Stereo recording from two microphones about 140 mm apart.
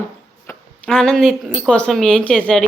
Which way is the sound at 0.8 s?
5° left (ahead or behind).